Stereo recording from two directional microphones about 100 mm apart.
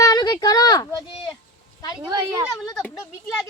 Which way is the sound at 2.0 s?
45° right (ahead or behind).